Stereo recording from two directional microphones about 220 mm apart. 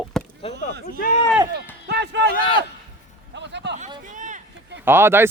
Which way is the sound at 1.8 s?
50° right (ahead or behind).